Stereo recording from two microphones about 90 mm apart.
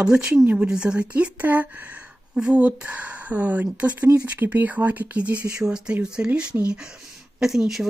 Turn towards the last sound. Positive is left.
turn(degrees=-5)  # may be behind; listen again after turning